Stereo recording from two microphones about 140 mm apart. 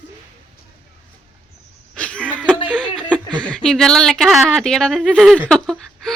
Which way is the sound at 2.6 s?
5° left (ahead or behind).